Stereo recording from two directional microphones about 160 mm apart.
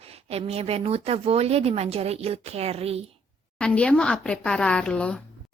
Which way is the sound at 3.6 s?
5° left (ahead or behind).